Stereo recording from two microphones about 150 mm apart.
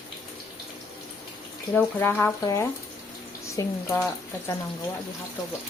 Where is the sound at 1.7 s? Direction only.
10° left (ahead or behind).